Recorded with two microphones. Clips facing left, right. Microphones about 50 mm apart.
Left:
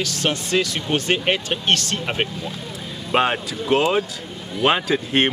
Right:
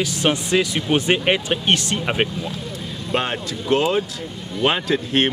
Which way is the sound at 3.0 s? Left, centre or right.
Centre.